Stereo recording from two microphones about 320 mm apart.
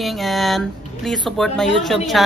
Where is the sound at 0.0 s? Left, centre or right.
Centre.